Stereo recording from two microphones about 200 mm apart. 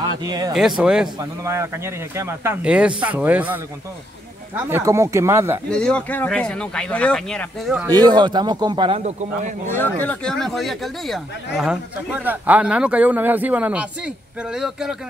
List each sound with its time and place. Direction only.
0.5 s speech: centre (ahead or behind)
1.4 s speech: 15° right (ahead or behind)
5.7 s speech: 5° left (ahead or behind)
7.8 s a man's voice: 20° right (ahead or behind); by 9.6 s 35° right (ahead or behind)
9.7 s speech: 10° left (ahead or behind)